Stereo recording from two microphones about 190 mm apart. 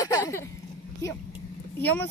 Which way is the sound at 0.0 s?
15° left (ahead or behind).